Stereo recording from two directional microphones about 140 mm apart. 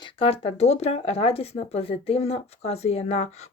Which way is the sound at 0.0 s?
45° left (ahead or behind).